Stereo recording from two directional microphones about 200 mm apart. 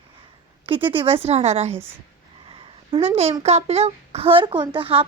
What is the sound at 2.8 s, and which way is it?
A woman's voice, 30° right (ahead or behind).